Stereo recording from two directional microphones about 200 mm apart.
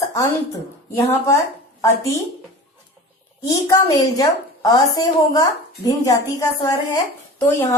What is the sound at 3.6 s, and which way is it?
A woman's voice, 15° left (ahead or behind).